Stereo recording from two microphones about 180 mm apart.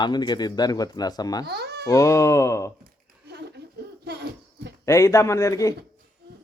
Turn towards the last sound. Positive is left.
turn(degrees=15)  # may be behind; listen again after turning